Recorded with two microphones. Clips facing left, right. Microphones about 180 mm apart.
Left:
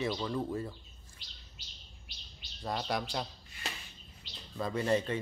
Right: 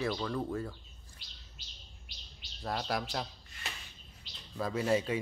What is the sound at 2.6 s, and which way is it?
Speech, centre (ahead or behind).